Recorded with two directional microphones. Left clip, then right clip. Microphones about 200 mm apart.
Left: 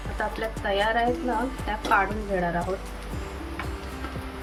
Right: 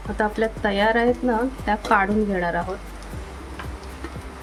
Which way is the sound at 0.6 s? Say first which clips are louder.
Right 3 dB; 50° right (ahead or behind).